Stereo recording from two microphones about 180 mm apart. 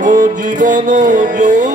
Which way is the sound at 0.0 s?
45° right (ahead or behind).